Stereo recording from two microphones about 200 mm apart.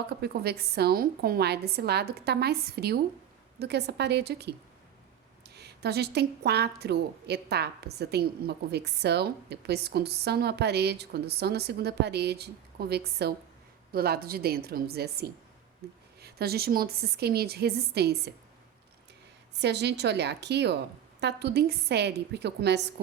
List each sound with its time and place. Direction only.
0.1 s a woman's voice: 55° right (ahead or behind)
5.5 s a woman's voice: 55° right (ahead or behind)
19.5 s a woman's voice: 55° right (ahead or behind)